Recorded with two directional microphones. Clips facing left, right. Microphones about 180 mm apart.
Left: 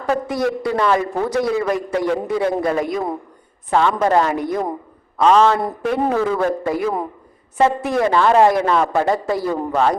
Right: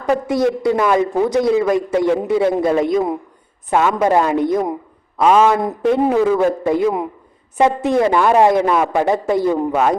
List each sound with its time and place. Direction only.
0.1 s a man's voice: 20° right (ahead or behind)
0.8 s a man's voice: 10° right (ahead or behind)
3.7 s speech: 10° right (ahead or behind)
5.6 s a man's voice: 20° right (ahead or behind)